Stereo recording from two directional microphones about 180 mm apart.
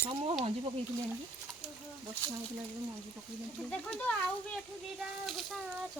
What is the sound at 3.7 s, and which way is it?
Speech, 5° left (ahead or behind).